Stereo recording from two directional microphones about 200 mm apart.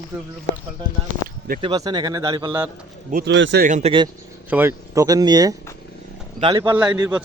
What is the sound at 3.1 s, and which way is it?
Speech, 60° right (ahead or behind).